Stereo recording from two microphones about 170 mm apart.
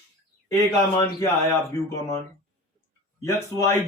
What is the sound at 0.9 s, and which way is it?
Speech, 20° left (ahead or behind).